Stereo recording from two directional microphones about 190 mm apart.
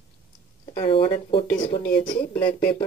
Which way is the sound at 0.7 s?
25° left (ahead or behind).